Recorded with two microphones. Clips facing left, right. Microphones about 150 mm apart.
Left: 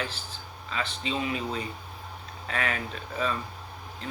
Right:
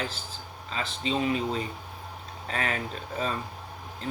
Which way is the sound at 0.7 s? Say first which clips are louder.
Right 2 dB; 35° right (ahead or behind).